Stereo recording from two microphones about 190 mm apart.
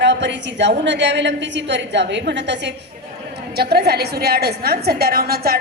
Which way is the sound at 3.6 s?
55° right (ahead or behind).